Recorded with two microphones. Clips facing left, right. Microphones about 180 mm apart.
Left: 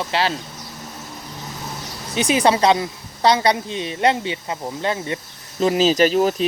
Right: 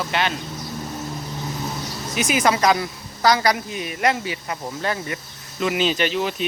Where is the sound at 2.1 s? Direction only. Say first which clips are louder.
Left 3 dB; 30° left (ahead or behind).